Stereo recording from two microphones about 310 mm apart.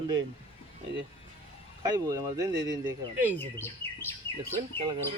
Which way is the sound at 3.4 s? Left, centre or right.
Centre.